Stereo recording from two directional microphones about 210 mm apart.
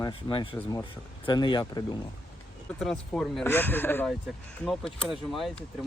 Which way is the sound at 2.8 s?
5° left (ahead or behind).